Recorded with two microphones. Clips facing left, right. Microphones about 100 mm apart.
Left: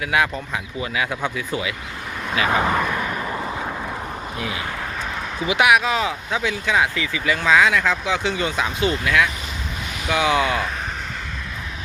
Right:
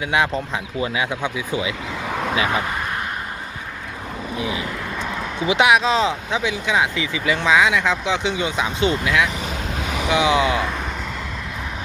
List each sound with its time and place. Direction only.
0.8 s speech: 20° right (ahead or behind)
5.5 s speech: 25° right (ahead or behind)